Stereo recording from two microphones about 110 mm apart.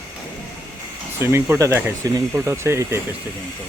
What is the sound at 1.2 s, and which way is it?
Speech, 25° right (ahead or behind).